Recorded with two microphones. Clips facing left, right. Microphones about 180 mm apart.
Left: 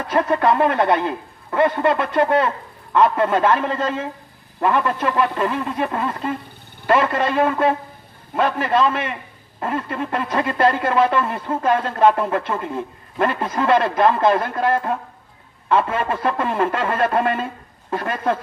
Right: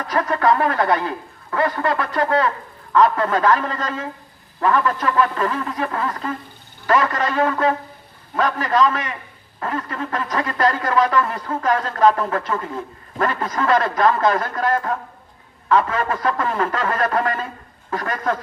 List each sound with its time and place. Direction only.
0.1 s speech: 25° left (ahead or behind)